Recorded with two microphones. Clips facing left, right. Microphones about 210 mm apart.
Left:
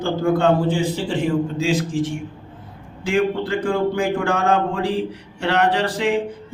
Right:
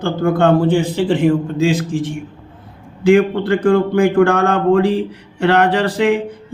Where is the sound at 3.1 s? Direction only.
60° right (ahead or behind).